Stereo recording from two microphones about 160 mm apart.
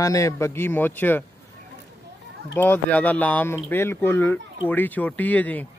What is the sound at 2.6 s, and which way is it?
Speech, 10° left (ahead or behind).